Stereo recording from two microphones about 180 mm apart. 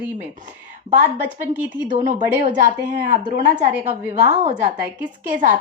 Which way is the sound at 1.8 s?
45° right (ahead or behind).